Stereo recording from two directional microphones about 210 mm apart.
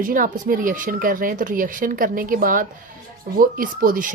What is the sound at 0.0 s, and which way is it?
A woman's voice, 40° right (ahead or behind).